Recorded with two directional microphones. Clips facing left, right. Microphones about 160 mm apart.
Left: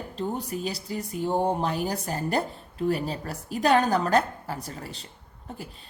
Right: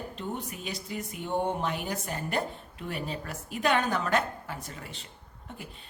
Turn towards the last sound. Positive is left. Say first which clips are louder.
# left 5 dB
turn(degrees=35)  # may be behind; listen again after turning